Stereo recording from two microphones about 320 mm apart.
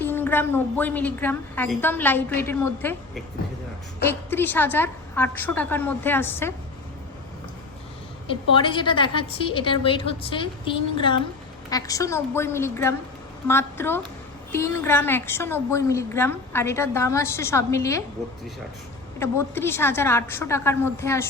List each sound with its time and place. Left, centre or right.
0.0 s a woman's voice: centre
8.3 s a woman's voice: centre
19.2 s a woman's voice: centre